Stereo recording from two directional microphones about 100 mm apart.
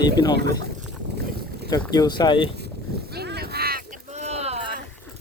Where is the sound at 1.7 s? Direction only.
40° left (ahead or behind).